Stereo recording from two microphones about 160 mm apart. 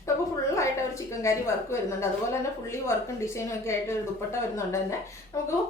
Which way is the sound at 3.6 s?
15° left (ahead or behind).